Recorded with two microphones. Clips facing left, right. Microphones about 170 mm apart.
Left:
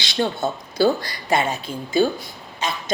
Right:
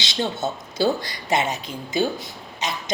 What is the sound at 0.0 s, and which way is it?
A woman's voice, 20° right (ahead or behind).